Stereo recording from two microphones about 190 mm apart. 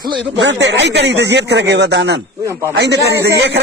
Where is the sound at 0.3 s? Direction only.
70° right (ahead or behind).